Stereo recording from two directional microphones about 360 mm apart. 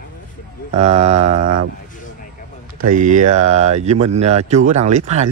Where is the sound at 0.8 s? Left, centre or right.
Centre.